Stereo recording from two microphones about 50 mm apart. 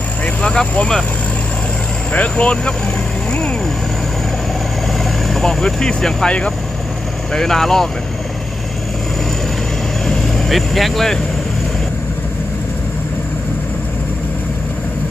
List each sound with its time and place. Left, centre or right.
0.4 s speech: centre
2.1 s speech: left
5.3 s speech: centre
7.3 s speech: centre
10.5 s speech: centre